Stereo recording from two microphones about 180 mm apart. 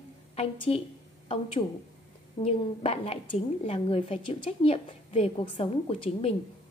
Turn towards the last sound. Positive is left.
turn(degrees=30)  # may be behind; listen again after turning